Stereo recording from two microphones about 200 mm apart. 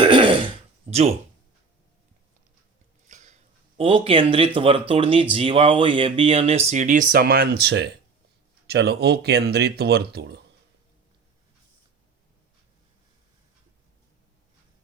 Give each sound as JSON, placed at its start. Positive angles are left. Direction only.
{"t": 0.0, "sound": "throat clearing", "side_deg": -25}
{"t": 0.9, "sound": "speech", "side_deg": -30}
{"t": 3.1, "sound": "a sound", "side_deg": -35}
{"t": 3.8, "sound": "speech", "side_deg": -30}